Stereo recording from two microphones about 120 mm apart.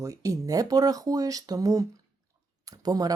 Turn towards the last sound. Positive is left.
turn(degrees=-30)  # may be behind; listen again after turning